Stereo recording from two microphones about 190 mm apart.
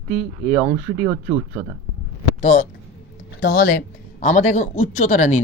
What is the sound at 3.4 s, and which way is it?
Speech, 60° left (ahead or behind).